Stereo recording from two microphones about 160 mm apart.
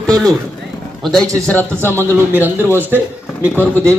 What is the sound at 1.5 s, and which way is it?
Speech, 10° left (ahead or behind).